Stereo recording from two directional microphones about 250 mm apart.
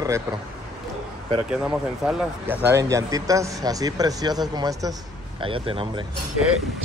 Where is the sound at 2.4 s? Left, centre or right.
Centre.